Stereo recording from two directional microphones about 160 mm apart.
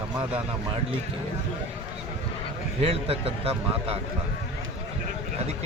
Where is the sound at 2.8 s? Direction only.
35° right (ahead or behind).